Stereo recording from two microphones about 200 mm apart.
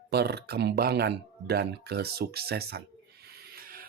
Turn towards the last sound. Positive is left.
turn(degrees=-50)  # may be behind; listen again after turning